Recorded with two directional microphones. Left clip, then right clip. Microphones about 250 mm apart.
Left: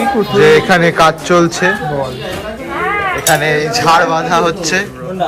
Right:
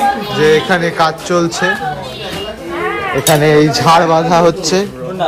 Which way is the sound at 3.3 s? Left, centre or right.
Right.